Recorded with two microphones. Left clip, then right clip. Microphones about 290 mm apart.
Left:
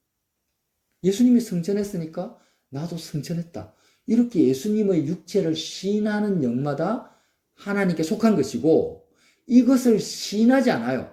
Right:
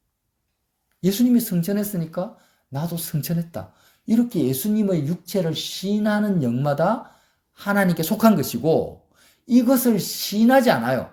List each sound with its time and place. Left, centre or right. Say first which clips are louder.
1.0 s speech: even; right